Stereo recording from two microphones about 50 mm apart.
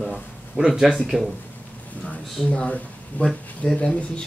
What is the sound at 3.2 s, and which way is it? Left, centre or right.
Speech, left.